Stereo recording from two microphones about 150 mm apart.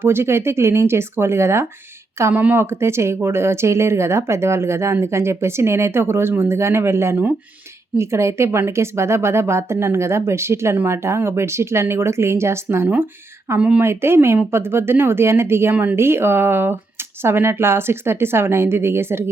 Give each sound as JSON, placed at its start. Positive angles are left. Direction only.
{"t": 0.0, "sound": "speech", "side_deg": -15}